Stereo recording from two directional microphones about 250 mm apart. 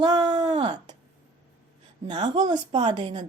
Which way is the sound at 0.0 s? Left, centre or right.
Centre.